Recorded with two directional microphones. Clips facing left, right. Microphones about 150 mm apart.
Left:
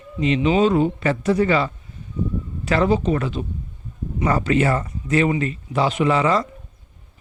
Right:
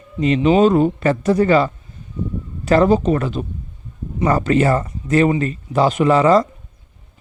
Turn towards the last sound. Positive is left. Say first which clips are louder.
# right 5 dB
turn(degrees=-40)  # may be behind; listen again after turning